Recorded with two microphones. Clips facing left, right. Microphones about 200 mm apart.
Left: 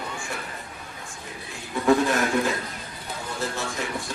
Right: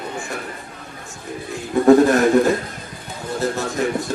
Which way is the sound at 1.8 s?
45° right (ahead or behind).